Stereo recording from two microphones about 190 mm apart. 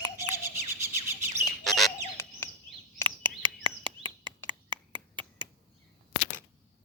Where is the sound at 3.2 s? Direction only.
25° right (ahead or behind).